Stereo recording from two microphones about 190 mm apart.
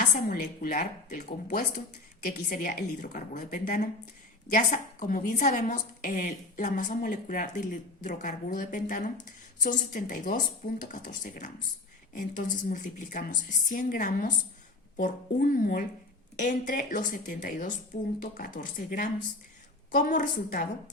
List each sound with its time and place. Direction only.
0.0 s a woman's voice: 50° left (ahead or behind)